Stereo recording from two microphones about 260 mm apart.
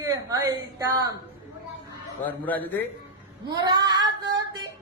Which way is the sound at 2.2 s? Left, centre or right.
Centre.